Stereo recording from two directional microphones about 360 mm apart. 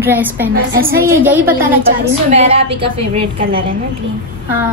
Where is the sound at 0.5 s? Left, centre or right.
Right.